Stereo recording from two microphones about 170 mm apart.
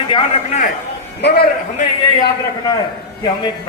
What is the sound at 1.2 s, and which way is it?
Speech, 80° left.